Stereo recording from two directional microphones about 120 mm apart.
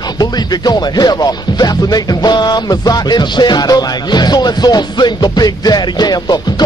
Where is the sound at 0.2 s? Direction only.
35° left (ahead or behind).